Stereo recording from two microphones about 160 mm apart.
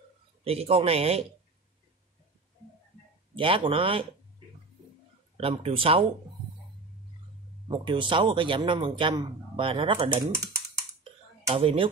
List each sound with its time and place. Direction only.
0.4 s speech: 40° right (ahead or behind)
3.3 s speech: 35° right (ahead or behind)
5.4 s speech: 35° right (ahead or behind)
7.6 s speech: 30° right (ahead or behind)
11.5 s speech: 35° right (ahead or behind)